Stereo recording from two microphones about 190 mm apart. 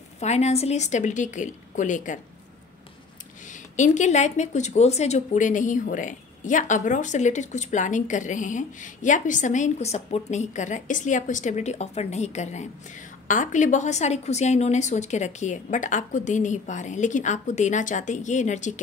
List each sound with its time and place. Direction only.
0.2 s a woman's voice: 35° left (ahead or behind)
3.7 s a woman's voice: 40° left (ahead or behind)